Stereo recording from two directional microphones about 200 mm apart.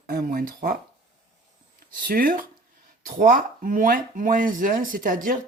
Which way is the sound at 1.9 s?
45° right (ahead or behind).